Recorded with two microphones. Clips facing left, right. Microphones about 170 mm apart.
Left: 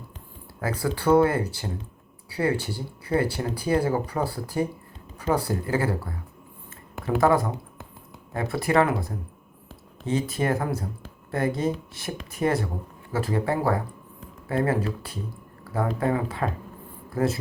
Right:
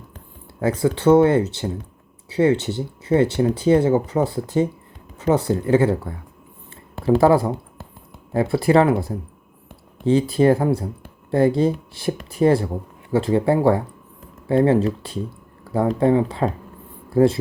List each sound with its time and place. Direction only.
0.6 s speech: 25° right (ahead or behind)